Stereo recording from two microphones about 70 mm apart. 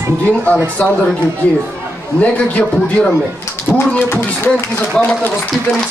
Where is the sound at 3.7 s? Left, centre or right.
Centre.